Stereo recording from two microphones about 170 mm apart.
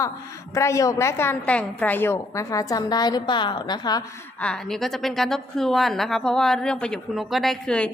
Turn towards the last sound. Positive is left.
turn(degrees=5)  # may be behind; listen again after turning